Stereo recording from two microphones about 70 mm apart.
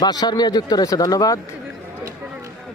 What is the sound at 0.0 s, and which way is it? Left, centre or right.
Speech, left.